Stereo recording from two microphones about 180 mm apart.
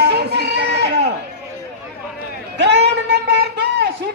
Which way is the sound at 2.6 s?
70° right (ahead or behind).